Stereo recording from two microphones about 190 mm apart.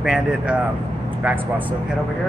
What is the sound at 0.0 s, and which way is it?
A man's voice, 5° right (ahead or behind).